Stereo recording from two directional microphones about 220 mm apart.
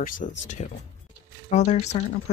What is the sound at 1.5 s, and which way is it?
Speech, 30° left (ahead or behind).